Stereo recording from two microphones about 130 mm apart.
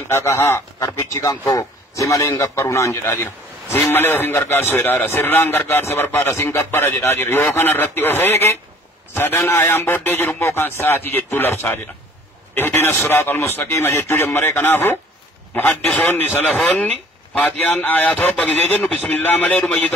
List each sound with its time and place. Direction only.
0.1 s a man's voice: 20° left (ahead or behind)
17.4 s a man's voice: 15° left (ahead or behind)
19.5 s speech: 5° left (ahead or behind)